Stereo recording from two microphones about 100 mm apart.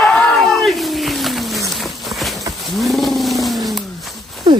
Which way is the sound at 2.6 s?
Centre (ahead or behind).